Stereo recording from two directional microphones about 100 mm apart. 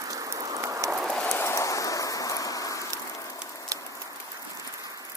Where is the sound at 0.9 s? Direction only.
10° right (ahead or behind).